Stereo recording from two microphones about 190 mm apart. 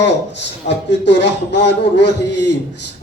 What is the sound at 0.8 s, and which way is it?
A man's voice, 65° left (ahead or behind).